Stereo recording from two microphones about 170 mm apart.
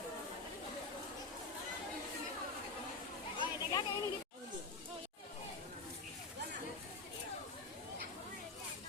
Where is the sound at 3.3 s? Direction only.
25° left (ahead or behind).